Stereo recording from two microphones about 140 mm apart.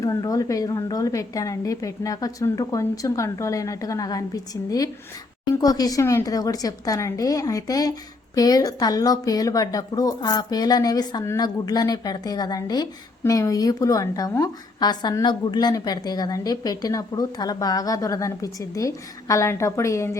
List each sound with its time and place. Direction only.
0.0 s speech: 25° left (ahead or behind)